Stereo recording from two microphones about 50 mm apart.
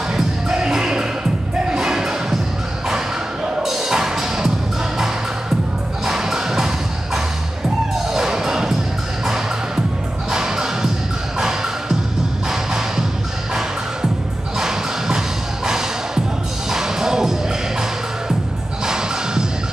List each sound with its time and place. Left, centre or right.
0.1 s music: centre
1.7 s a sound: centre
3.4 s music: centre
6.0 s music: centre
7.9 s music: centre
10.3 s music: centre
14.6 s a sound: centre
16.7 s music: centre
18.9 s music: centre